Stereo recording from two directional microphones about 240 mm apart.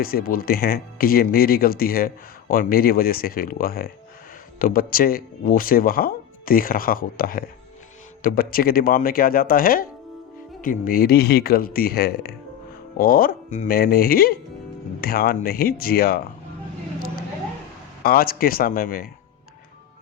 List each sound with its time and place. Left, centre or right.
0.0 s speech: left
18.0 s speech: left